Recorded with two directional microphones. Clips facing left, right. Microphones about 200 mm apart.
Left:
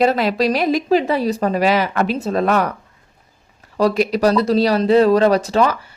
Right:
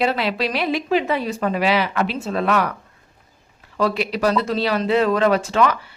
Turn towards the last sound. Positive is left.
turn(degrees=40)  # may be behind; listen again after turning